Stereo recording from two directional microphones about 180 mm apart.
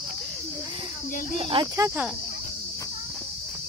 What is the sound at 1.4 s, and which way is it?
Speech, 25° right (ahead or behind).